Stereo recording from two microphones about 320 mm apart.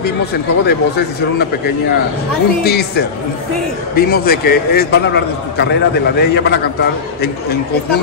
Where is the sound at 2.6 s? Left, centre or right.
Left.